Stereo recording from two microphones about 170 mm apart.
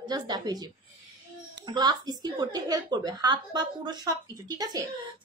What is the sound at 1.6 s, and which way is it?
Speech, 25° right (ahead or behind).